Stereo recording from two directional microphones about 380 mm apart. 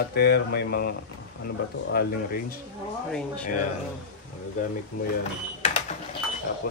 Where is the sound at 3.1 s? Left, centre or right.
Centre.